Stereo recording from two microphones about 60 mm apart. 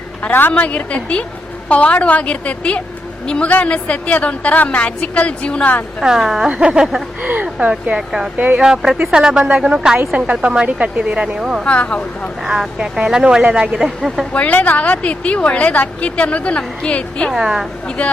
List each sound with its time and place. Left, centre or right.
0.2 s a woman's voice: left
6.0 s speech: centre
6.5 s speech: centre
11.6 s a woman's voice: left
12.5 s speech: centre
14.3 s a woman's voice: left
17.3 s speech: centre
17.8 s a woman's voice: left